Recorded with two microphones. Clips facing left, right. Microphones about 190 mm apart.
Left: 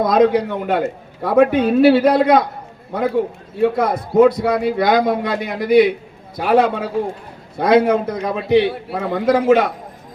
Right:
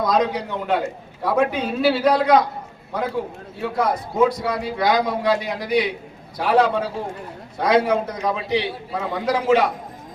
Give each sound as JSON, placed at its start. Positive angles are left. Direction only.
{"t": 0.0, "sound": "a man's voice", "side_deg": 55}
{"t": 3.6, "sound": "a man's voice", "side_deg": 60}